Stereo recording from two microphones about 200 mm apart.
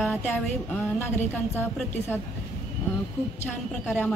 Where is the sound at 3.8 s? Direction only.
10° left (ahead or behind).